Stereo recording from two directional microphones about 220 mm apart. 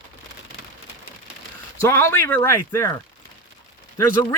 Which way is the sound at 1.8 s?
10° left (ahead or behind).